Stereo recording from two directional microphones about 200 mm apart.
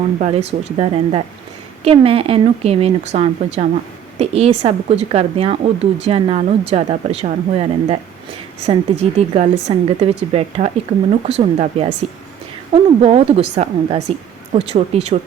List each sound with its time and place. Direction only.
0.2 s speech: 30° right (ahead or behind)